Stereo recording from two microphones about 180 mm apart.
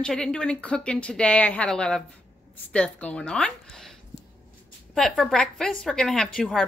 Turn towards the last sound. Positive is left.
turn(degrees=0)  # may be behind; listen again after turning